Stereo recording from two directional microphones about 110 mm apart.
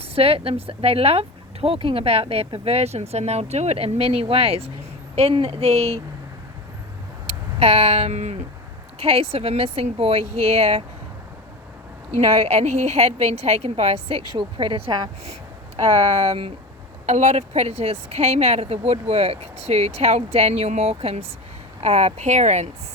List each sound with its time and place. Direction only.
0.0 s speech: 65° right (ahead or behind)
7.3 s speech: 70° right (ahead or behind); by 8.4 s 85° right
9.0 s speech: 65° right (ahead or behind)
12.5 s speech: 80° right; by 15.1 s 45° right (ahead or behind)
15.2 s speech: 70° right (ahead or behind)
21.8 s speech: 80° right